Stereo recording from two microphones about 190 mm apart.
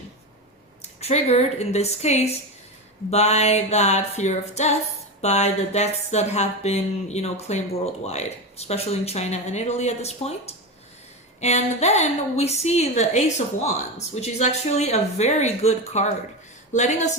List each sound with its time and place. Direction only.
0.8 s speech: 35° left (ahead or behind)
11.3 s speech: 35° left (ahead or behind)